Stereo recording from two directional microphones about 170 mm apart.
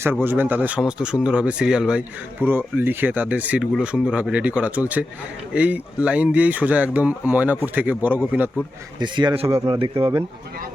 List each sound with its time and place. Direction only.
0.3 s speech: 10° right (ahead or behind)
9.0 s speech: 25° right (ahead or behind)